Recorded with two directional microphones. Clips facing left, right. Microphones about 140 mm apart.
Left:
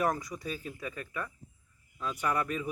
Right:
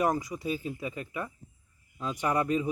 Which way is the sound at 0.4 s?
15° right (ahead or behind).